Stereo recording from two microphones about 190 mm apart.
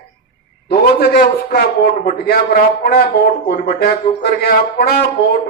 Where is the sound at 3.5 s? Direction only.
50° left (ahead or behind).